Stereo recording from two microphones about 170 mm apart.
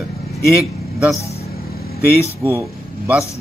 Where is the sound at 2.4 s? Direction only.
15° right (ahead or behind).